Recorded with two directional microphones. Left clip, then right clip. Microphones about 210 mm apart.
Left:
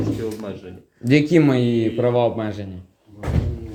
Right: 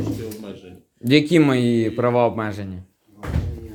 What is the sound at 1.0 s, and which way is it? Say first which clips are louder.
Speech: even; 40° right (ahead or behind).